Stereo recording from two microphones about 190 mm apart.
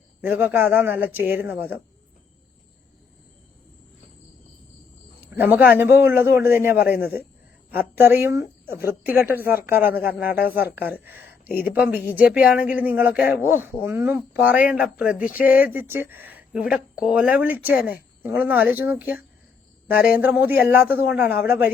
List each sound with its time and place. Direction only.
0.2 s speech: 10° right (ahead or behind)
5.2 s speech: 10° right (ahead or behind)